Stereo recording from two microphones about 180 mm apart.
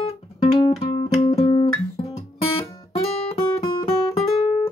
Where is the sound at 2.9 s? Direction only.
30° left (ahead or behind).